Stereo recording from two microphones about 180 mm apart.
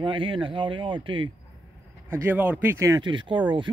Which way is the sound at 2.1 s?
10° right (ahead or behind).